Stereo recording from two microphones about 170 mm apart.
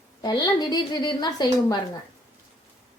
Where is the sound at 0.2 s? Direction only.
25° left (ahead or behind).